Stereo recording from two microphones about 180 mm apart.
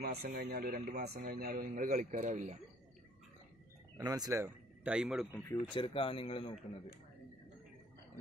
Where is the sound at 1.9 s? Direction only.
45° right (ahead or behind).